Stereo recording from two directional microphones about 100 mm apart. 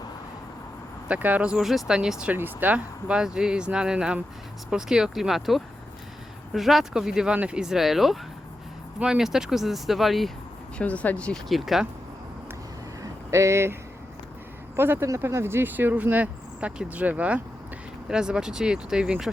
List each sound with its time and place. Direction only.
1.0 s speech: 15° right (ahead or behind)
10.8 s speech: 15° left (ahead or behind)
11.4 s speech: centre (ahead or behind)
13.0 s a sound: 30° right (ahead or behind)
14.8 s speech: 20° right (ahead or behind)